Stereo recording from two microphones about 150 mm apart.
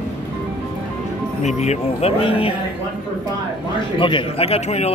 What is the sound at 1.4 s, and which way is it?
Speech, 50° left (ahead or behind).